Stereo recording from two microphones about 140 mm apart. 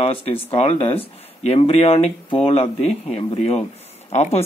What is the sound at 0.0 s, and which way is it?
Speech, 45° left (ahead or behind).